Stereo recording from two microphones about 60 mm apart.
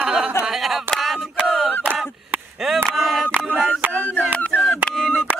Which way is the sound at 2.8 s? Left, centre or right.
Centre.